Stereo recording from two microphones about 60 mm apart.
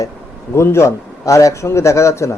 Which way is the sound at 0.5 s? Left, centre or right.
Left.